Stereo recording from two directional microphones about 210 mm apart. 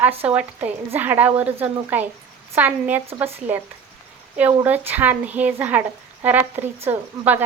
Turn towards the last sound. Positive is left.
turn(degrees=-10)  # may be behind; listen again after turning